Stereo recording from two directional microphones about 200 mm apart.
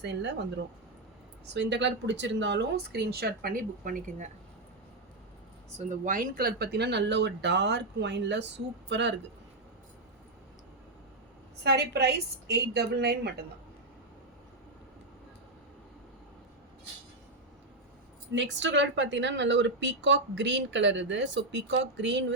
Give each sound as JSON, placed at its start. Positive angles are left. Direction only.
{"t": 0.0, "sound": "speech", "side_deg": -60}
{"t": 1.5, "sound": "speech", "side_deg": -60}
{"t": 5.7, "sound": "speech", "side_deg": -40}
{"t": 11.6, "sound": "speech", "side_deg": -55}
{"t": 18.3, "sound": "speech", "side_deg": -65}